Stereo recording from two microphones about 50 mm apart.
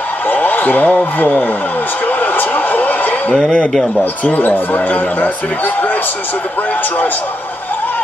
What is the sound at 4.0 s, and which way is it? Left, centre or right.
A man's voice, left.